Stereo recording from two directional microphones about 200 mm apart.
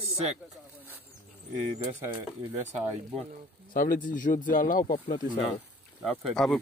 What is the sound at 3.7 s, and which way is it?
Speech, 45° left (ahead or behind).